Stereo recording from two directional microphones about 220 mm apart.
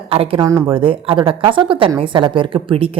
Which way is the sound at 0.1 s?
25° right (ahead or behind).